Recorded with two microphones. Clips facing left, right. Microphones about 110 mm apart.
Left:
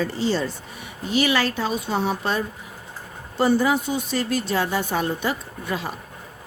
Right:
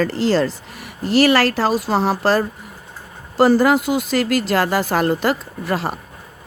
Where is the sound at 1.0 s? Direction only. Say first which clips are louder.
Right 7 dB; 70° right (ahead or behind).